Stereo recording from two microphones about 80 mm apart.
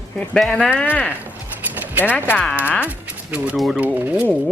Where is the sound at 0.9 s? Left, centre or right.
Left.